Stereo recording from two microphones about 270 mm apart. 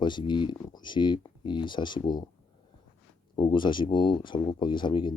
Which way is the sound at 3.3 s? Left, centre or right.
Centre.